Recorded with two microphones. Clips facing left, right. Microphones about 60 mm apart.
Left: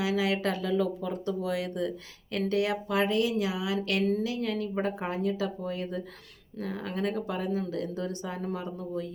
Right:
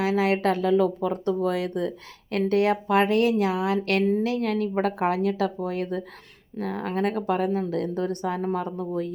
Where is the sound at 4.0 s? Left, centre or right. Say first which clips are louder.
Right 5 dB; right.